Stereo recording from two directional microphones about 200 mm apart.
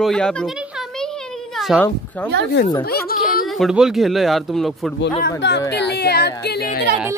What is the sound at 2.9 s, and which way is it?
Speech, 50° left (ahead or behind).